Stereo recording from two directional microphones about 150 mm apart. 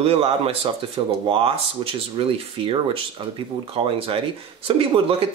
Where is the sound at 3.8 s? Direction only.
35° right (ahead or behind).